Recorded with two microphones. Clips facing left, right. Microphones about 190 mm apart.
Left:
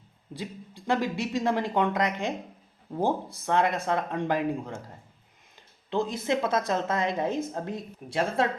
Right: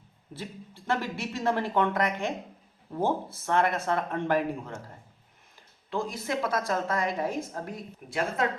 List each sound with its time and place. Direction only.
0.3 s speech: 15° left (ahead or behind)
3.3 s speech: 15° left (ahead or behind)
5.9 s a woman's voice: 20° left (ahead or behind)